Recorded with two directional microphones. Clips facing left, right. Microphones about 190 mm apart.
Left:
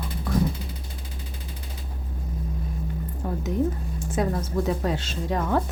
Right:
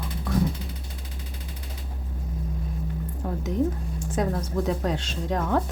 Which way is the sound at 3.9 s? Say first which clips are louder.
Left 1 dB; 5° left (ahead or behind).